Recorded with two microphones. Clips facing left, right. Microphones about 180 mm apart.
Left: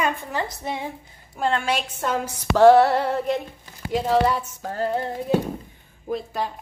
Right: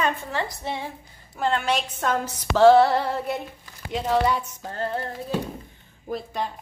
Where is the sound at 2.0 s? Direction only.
10° left (ahead or behind).